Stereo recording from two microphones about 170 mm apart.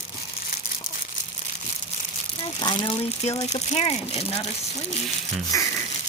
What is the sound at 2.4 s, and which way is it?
Speech, 25° left (ahead or behind).